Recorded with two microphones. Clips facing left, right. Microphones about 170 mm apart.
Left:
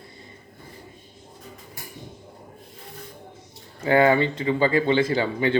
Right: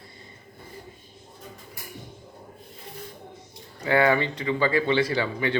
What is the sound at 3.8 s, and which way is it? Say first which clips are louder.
Speech: left 3 dB; 25° left (ahead or behind).